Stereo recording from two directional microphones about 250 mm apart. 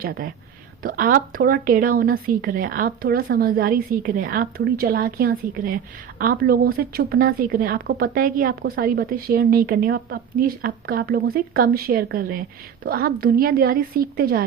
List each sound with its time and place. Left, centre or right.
0.0 s a woman's voice: right